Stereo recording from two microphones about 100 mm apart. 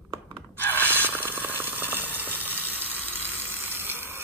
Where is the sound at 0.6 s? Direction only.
20° left (ahead or behind).